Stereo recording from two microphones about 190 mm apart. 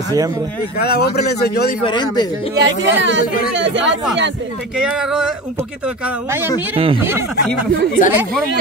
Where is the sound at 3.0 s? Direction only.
75° right (ahead or behind).